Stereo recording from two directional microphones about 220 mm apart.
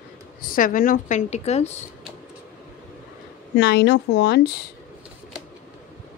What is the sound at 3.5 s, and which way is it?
A woman's voice, 50° left (ahead or behind).